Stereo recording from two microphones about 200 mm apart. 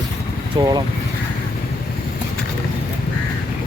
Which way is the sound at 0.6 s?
20° right (ahead or behind).